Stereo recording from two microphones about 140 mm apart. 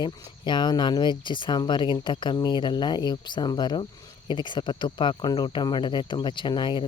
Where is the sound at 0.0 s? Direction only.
35° left (ahead or behind).